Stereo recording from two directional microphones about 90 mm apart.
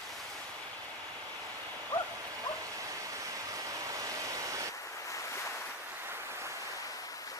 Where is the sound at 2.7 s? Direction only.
40° right (ahead or behind).